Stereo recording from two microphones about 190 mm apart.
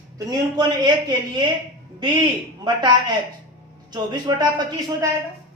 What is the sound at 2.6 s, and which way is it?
A man's voice, 25° right (ahead or behind).